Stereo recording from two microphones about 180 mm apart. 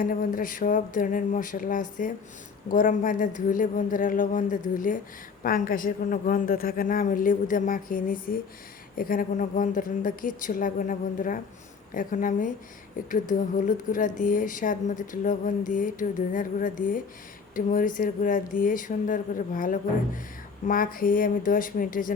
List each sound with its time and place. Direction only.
0.0 s speech: 50° left (ahead or behind)